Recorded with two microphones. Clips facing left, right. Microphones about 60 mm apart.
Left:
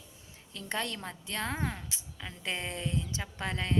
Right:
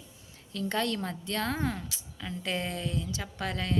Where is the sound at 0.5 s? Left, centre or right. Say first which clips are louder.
Right 5 dB; centre.